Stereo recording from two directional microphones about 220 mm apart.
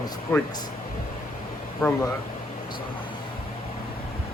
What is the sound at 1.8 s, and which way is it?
Speech, 10° left (ahead or behind).